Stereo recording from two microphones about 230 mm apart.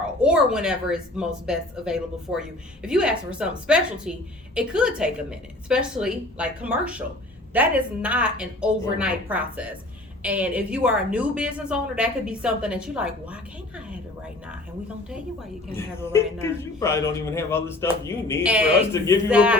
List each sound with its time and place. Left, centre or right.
0.0 s a woman's voice: centre
15.7 s a man's voice: centre
18.4 s a woman's voice: centre